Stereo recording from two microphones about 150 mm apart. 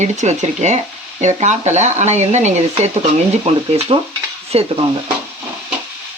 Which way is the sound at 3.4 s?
40° right (ahead or behind).